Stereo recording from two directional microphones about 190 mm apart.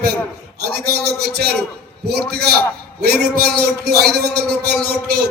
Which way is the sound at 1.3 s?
55° right (ahead or behind).